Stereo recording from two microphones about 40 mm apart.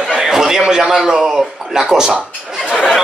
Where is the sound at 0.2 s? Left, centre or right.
Centre.